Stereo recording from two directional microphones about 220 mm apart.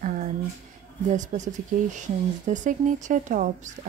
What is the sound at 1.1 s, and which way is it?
Speech, 35° right (ahead or behind).